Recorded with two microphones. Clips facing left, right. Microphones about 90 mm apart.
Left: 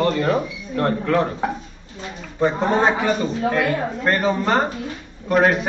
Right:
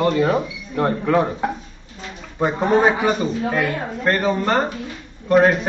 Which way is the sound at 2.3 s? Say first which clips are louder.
Right 1 dB; 15° right (ahead or behind).